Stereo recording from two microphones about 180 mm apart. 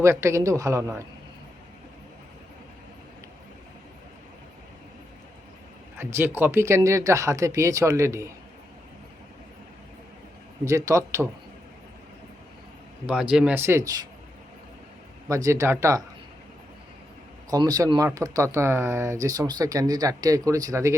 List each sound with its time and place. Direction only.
0.0 s speech: 15° right (ahead or behind)
6.0 s speech: 15° right (ahead or behind)
10.7 s speech: 15° right (ahead or behind)
13.1 s speech: 5° right (ahead or behind)
15.3 s speech: 15° right (ahead or behind)
17.5 s speech: 20° right (ahead or behind)